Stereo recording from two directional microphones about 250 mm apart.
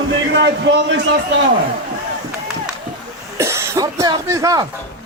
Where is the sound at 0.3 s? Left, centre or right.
Right.